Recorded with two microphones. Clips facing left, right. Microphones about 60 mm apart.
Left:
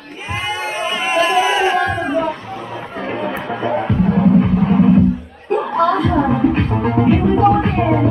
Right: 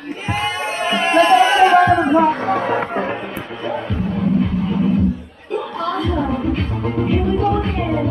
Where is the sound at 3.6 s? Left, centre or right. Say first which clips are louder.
Left 5 dB; left.